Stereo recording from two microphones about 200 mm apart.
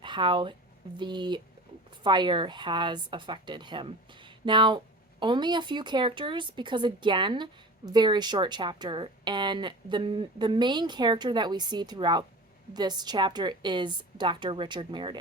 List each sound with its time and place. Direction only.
0.0 s speech: 25° right (ahead or behind)